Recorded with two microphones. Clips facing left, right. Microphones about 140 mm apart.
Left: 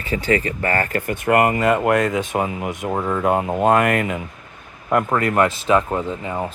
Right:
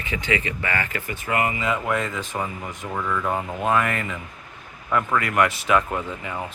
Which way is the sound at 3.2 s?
60° left (ahead or behind).